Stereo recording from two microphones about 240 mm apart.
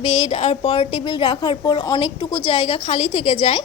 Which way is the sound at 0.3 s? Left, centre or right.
Left.